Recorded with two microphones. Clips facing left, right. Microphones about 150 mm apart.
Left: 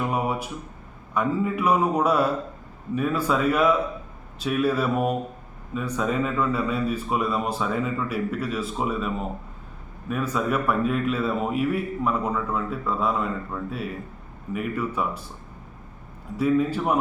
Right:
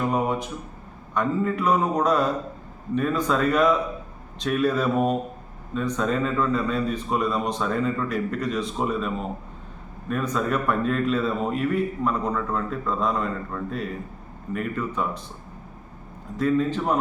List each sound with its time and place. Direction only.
0.0 s a sound: 10° left (ahead or behind)
1.1 s a man's voice: 5° left (ahead or behind)
16.4 s a man's voice: 10° left (ahead or behind)